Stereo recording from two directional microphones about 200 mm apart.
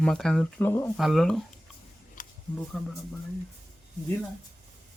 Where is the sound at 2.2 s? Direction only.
40° left (ahead or behind).